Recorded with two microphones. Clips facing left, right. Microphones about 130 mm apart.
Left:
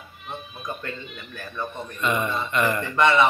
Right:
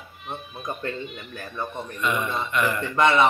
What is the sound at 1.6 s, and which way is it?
Speech, 10° right (ahead or behind).